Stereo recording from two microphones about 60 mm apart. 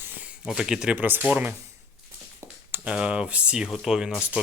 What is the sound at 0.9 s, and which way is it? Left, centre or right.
Speech, right.